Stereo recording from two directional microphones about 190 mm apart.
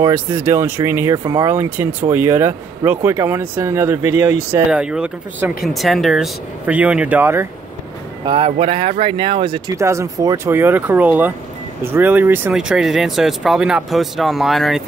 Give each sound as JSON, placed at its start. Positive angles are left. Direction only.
{"t": 0.0, "sound": "speech", "side_deg": -10}
{"t": 8.3, "sound": "speech", "side_deg": -30}